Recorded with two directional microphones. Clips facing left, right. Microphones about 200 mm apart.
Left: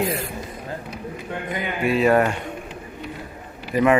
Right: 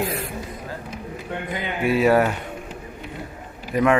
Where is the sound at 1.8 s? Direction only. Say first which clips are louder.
Even; centre (ahead or behind).